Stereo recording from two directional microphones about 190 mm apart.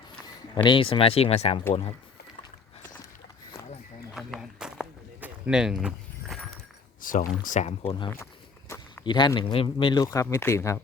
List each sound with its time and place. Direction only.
0.5 s speech: 25° left (ahead or behind)
4.1 s a sound: centre (ahead or behind)
7.0 s speech: 45° left (ahead or behind); by 8.1 s 25° left (ahead or behind)
8.7 s walk: 15° left (ahead or behind)
9.0 s speech: 25° left (ahead or behind)